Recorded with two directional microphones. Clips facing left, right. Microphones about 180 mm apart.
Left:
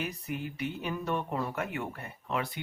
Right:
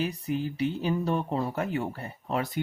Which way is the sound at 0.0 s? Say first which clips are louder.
Right 6 dB; 30° right (ahead or behind).